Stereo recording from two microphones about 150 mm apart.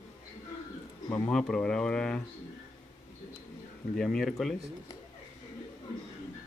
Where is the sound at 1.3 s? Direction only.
5° left (ahead or behind).